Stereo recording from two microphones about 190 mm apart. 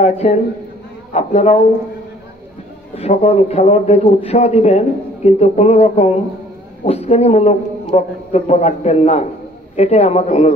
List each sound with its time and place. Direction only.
0.0 s speech: 35° left (ahead or behind)
3.0 s a woman's voice: 35° left (ahead or behind)